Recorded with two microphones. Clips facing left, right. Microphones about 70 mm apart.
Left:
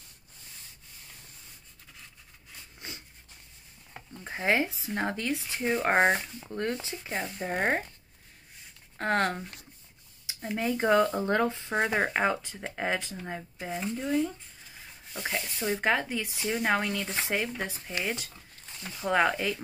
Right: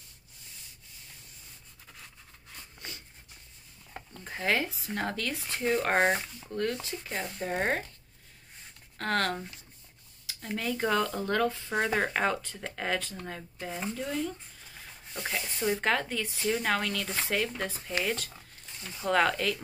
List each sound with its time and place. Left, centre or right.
4.1 s speech: centre
6.9 s speech: centre
8.9 s speech: left
10.2 s speech: centre